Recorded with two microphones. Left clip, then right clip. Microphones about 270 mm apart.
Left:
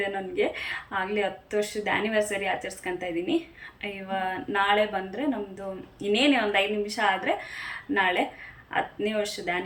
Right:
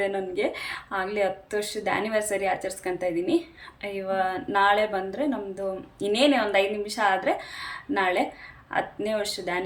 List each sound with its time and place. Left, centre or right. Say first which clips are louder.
0.0 s speech: right 1 dB; centre